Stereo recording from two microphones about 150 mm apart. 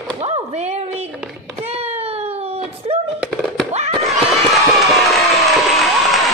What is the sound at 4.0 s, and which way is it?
Crowd, centre (ahead or behind).